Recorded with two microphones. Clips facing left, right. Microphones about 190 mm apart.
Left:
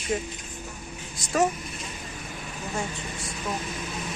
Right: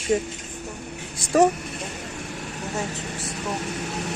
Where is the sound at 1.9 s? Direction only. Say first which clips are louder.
Right 5 dB; 75° right (ahead or behind).